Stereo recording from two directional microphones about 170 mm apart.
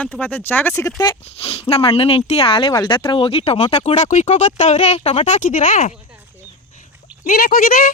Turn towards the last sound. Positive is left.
turn(degrees=55)  # may be behind; listen again after turning